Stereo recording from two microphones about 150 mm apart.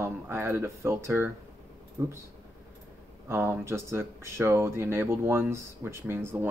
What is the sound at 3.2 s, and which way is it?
Speech, 15° right (ahead or behind).